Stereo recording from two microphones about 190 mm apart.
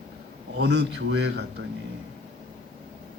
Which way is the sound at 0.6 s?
65° right (ahead or behind).